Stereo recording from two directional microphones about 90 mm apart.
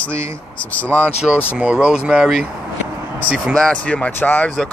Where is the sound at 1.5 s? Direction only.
10° right (ahead or behind).